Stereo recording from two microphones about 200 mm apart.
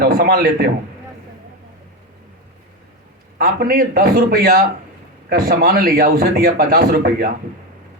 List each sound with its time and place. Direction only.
0.0 s speech: 50° right (ahead or behind)
3.3 s speech: 45° right (ahead or behind)